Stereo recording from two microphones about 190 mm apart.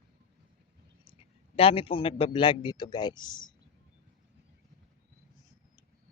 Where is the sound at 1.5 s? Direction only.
30° left (ahead or behind).